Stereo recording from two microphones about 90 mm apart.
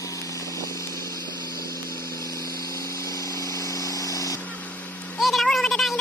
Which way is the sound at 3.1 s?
40° left (ahead or behind).